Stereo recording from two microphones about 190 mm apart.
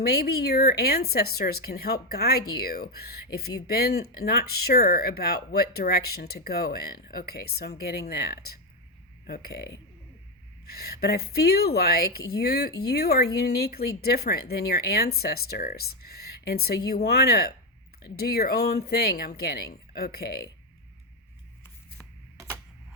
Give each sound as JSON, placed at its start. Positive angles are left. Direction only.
{"t": 0.0, "sound": "speech", "side_deg": 55}
{"t": 10.8, "sound": "speech", "side_deg": 55}